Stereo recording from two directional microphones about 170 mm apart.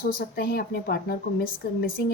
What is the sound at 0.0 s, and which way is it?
A woman's voice, 60° left (ahead or behind).